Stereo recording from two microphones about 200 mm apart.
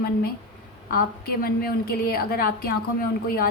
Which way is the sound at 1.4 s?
50° left (ahead or behind).